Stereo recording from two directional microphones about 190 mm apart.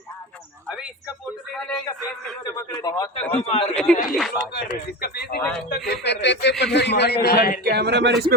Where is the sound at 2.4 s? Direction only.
20° left (ahead or behind).